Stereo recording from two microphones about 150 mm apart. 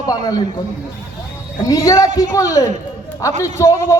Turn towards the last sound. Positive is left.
turn(degrees=20)  # may be behind; listen again after turning